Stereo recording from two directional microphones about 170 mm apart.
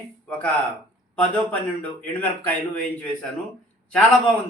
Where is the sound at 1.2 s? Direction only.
5° left (ahead or behind).